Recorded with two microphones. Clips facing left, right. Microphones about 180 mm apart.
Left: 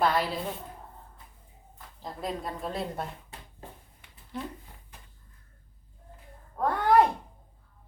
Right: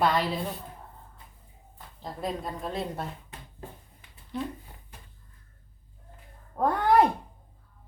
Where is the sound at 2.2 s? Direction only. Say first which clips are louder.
Right 1 dB; centre (ahead or behind).